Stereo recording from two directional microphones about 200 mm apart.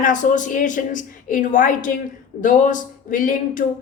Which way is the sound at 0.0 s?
40° left (ahead or behind).